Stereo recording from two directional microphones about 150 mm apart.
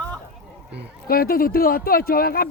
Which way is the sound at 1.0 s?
80° left.